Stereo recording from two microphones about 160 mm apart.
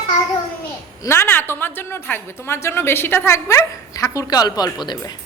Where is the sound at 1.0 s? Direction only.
15° left (ahead or behind).